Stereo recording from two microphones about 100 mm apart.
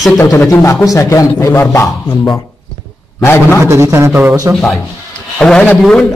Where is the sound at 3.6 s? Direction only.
30° right (ahead or behind).